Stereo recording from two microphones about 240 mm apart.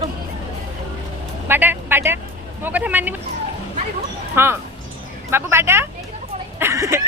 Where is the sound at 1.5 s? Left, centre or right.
Centre.